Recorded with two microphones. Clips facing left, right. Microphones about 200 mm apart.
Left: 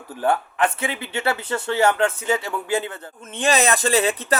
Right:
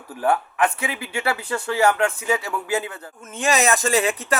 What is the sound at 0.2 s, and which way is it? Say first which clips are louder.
Speech: even; 25° left (ahead or behind).